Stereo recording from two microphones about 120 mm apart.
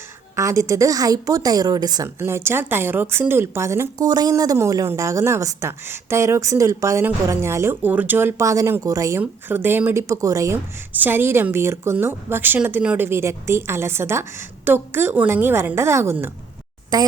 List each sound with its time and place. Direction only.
0.3 s a woman's voice: 25° right (ahead or behind)
16.9 s a child's voice: 35° right (ahead or behind)